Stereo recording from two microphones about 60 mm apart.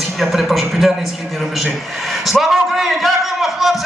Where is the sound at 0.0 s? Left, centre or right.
Centre.